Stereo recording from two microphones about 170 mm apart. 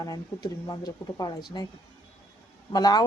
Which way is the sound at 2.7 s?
25° left (ahead or behind).